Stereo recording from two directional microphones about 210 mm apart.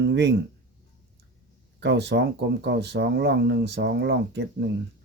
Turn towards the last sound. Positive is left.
turn(degrees=-55)  # may be behind; listen again after turning